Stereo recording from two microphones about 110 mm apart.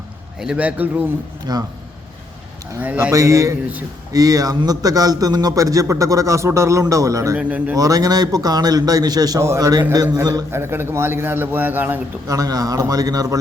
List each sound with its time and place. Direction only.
0.3 s a man's voice: 10° right (ahead or behind)
1.5 s a man's voice: 40° right (ahead or behind)
2.8 s a man's voice: 15° right (ahead or behind)
3.1 s a man's voice: 30° right (ahead or behind)
7.3 s a man's voice: 10° right (ahead or behind)
7.8 s a man's voice: 35° right (ahead or behind); by 11.9 s 15° right (ahead or behind)
12.3 s a man's voice: 30° right (ahead or behind)